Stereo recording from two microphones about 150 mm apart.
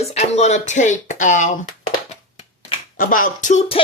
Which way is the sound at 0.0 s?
45° left (ahead or behind).